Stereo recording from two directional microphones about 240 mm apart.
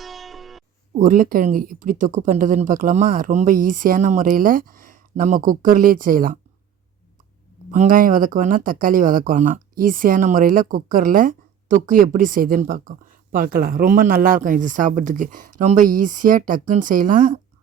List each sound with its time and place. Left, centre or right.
0.0 s music: centre
0.9 s speech: right
7.7 s speech: right